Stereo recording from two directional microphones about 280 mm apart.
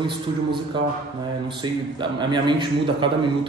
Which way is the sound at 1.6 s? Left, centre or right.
Centre.